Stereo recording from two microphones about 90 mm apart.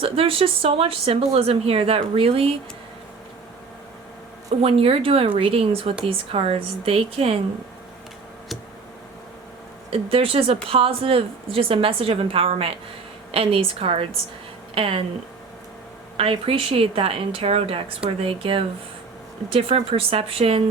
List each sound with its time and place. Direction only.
0.0 s speech: 90° right
4.6 s speech: 90° right
9.9 s speech: 90° right
16.1 s speech: 90° right